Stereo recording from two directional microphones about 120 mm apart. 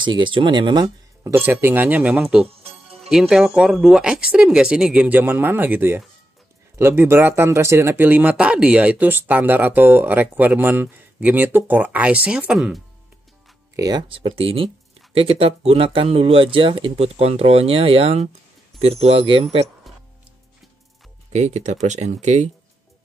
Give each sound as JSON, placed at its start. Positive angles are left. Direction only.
{"t": 0.0, "sound": "speech", "side_deg": -40}
{"t": 1.2, "sound": "speech", "side_deg": -20}
{"t": 2.4, "sound": "music", "side_deg": -55}
{"t": 3.1, "sound": "speech", "side_deg": -5}
{"t": 13.7, "sound": "speech", "side_deg": -30}
{"t": 14.0, "sound": "speech", "side_deg": -45}
{"t": 21.3, "sound": "speech", "side_deg": -75}